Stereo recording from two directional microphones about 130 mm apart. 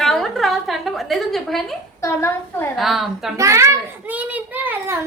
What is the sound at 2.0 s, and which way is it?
Speech, 20° left (ahead or behind).